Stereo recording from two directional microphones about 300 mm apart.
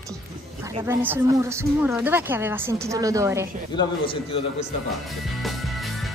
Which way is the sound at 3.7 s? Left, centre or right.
Centre.